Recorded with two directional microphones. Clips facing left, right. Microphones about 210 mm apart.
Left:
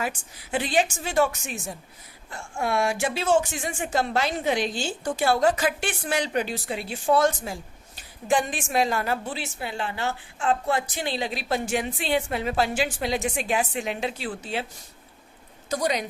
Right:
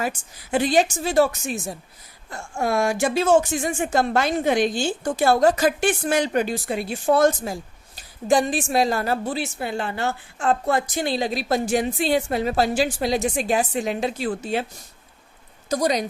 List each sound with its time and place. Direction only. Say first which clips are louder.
0.5 s a woman's voice: right 5 dB; 40° right (ahead or behind)
15.7 s a woman's voice: right 4 dB; 40° right (ahead or behind)